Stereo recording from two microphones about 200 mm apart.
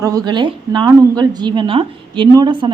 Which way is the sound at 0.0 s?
20° right (ahead or behind).